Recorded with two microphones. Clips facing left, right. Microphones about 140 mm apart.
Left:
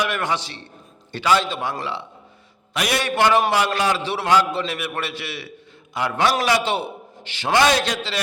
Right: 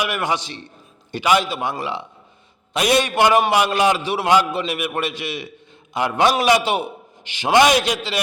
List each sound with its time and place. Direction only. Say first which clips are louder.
0.0 s a man's voice: right 1 dB; 10° right (ahead or behind)